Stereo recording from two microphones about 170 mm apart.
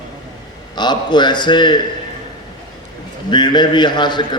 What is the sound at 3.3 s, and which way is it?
Speech, 25° left (ahead or behind).